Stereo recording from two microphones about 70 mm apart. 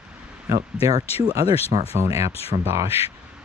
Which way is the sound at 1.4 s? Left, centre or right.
Left.